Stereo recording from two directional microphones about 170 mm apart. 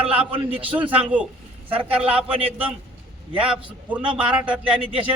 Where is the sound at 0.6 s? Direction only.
10° right (ahead or behind).